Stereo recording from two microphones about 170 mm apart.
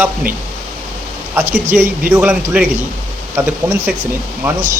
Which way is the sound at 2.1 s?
10° right (ahead or behind).